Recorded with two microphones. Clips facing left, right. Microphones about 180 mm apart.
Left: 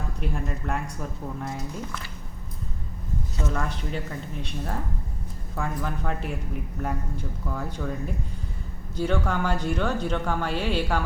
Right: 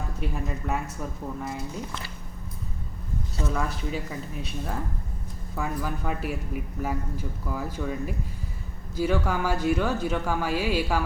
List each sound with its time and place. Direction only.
0.2 s speech: centre (ahead or behind)
3.5 s speech: 5° right (ahead or behind)